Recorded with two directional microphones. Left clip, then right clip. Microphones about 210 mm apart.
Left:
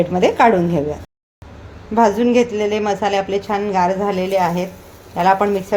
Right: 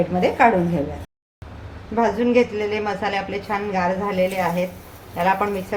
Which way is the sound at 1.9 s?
45° left (ahead or behind).